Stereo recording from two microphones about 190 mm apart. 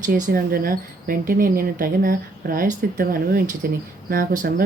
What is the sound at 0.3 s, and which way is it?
Speech, 50° right (ahead or behind).